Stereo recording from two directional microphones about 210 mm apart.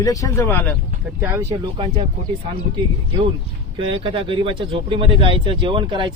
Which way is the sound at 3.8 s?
25° right (ahead or behind).